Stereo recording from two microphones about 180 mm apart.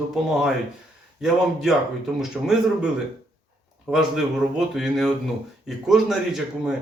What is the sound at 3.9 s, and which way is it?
A man's voice, centre (ahead or behind).